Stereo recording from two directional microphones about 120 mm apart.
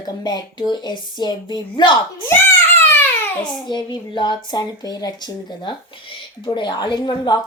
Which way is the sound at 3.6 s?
40° left (ahead or behind).